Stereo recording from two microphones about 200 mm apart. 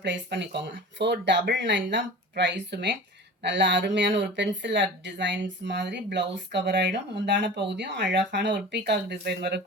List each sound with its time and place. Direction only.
0.0 s speech: 60° right (ahead or behind)